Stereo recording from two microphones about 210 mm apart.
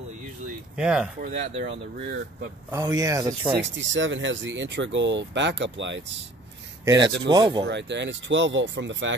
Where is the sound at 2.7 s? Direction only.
15° right (ahead or behind).